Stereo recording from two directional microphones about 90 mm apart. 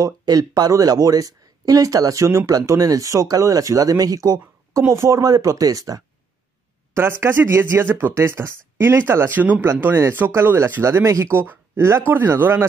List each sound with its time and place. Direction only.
0.0 s speech: 45° right (ahead or behind)
6.9 s speech: 25° right (ahead or behind)